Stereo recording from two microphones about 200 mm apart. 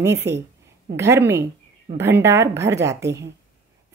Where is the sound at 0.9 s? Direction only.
15° right (ahead or behind).